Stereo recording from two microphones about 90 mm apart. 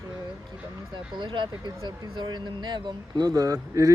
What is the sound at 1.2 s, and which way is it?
Speech, 60° right (ahead or behind).